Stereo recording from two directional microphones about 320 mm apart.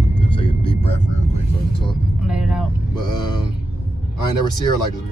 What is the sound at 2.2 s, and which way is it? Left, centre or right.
Vehicle, centre.